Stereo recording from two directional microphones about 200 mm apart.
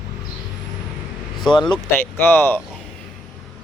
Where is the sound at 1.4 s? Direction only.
20° left (ahead or behind).